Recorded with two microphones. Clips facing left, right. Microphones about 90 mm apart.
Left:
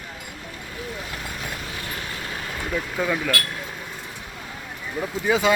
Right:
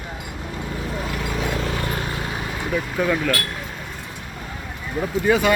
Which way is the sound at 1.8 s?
40° right (ahead or behind).